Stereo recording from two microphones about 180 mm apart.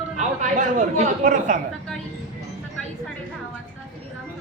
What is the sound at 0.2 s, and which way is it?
Speech, 45° right (ahead or behind).